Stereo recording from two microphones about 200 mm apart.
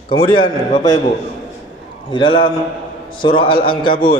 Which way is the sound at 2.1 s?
25° left (ahead or behind).